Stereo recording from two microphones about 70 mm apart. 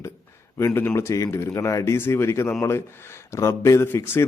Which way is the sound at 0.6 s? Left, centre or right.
Left.